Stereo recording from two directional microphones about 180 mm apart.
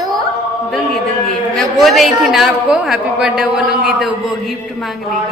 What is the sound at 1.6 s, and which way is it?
A woman's voice, centre (ahead or behind).